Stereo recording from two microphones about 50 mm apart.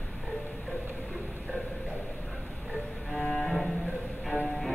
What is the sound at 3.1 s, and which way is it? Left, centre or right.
Cello, centre.